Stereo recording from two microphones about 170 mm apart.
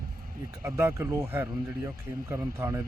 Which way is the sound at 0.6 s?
15° right (ahead or behind).